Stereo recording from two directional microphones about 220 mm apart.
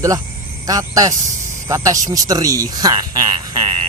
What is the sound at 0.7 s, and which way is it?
Speech, 15° right (ahead or behind).